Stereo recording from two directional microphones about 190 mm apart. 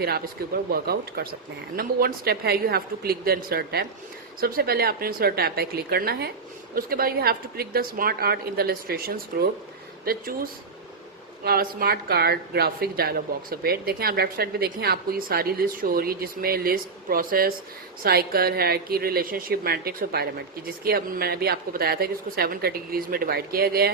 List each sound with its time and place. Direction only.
0.0 s a woman's voice: 55° right (ahead or behind)